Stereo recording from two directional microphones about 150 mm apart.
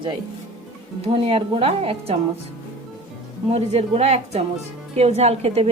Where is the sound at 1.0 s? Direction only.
40° right (ahead or behind).